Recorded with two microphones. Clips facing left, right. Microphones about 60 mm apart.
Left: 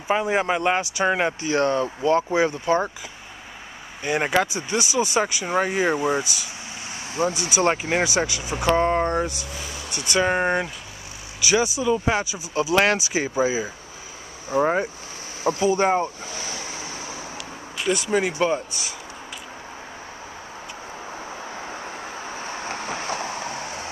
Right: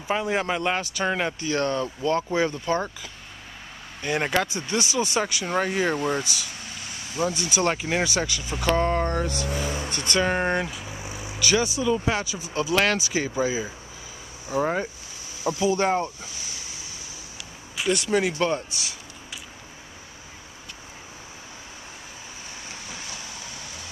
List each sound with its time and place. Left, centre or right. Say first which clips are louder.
0.1 s speech: left 3 dB; centre
4.0 s speech: left 3 dB; centre
7.2 s speech: left 3 dB; left
7.6 s speech: left 3 dB; centre
9.3 s speech: right 6 dB; right
10.0 s speech: left 3 dB; centre
16.3 s waves: left 8 dB; left
17.7 s speech: left 1 dB; centre
22.4 s vehicle: left 10 dB; left